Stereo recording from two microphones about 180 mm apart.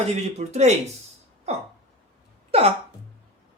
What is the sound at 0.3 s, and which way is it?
Speech, 35° right (ahead or behind).